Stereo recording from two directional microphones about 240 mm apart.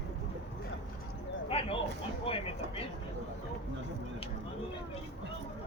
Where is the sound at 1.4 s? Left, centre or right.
Left.